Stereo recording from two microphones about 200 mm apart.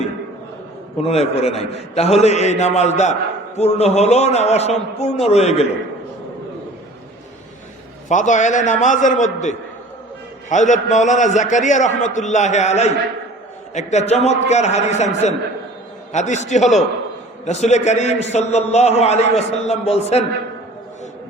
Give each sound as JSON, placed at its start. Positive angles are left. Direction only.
{"t": 1.0, "sound": "a man's voice", "side_deg": 30}
{"t": 8.1, "sound": "a man's voice", "side_deg": 40}